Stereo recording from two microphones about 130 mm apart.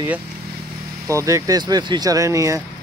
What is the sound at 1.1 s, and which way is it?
Speech, 25° right (ahead or behind).